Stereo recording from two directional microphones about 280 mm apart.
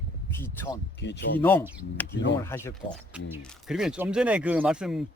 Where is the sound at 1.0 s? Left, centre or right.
Left.